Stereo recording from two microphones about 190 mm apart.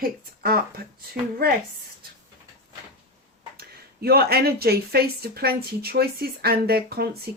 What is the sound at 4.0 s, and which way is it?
Speech, 55° right (ahead or behind).